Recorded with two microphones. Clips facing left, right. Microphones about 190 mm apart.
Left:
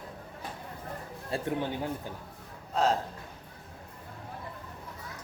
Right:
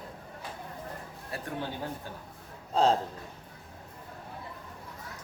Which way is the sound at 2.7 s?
30° right (ahead or behind).